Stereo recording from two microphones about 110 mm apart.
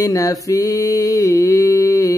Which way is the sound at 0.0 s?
30° left (ahead or behind).